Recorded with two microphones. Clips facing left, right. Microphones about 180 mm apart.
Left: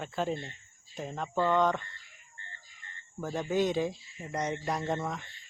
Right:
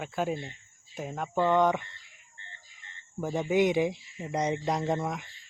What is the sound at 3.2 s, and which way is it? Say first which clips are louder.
Speech: right 4 dB; 15° right (ahead or behind).